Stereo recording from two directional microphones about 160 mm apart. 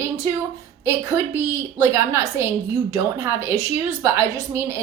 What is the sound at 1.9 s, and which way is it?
A woman's voice, 15° right (ahead or behind).